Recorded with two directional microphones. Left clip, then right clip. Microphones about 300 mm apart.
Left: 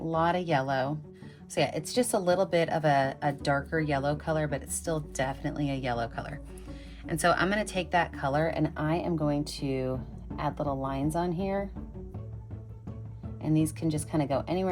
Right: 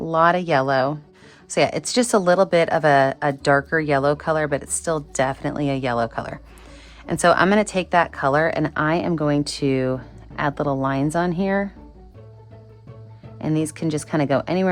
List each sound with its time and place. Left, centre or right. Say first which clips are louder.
0.2 s a woman's voice: right 10 dB; right
13.4 s a woman's voice: right 5 dB; right